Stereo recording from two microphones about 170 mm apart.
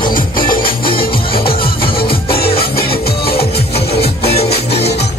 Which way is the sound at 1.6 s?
30° left (ahead or behind).